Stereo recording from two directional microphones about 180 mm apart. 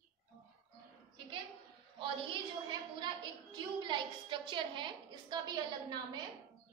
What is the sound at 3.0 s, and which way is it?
A woman's voice, 25° right (ahead or behind).